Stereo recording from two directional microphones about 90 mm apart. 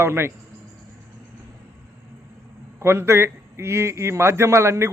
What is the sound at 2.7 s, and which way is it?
A man's voice, 30° right (ahead or behind).